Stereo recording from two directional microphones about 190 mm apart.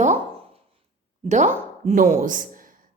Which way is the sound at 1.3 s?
40° right (ahead or behind).